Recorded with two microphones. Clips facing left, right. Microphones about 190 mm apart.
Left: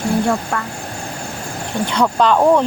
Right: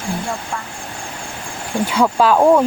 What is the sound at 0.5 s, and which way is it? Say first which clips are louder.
Speech: left 5 dB; 60° left (ahead or behind).